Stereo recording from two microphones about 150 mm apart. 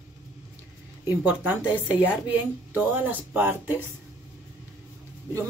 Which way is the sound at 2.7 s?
10° right (ahead or behind).